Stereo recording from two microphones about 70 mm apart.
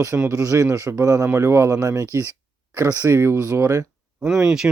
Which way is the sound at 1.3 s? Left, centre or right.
Right.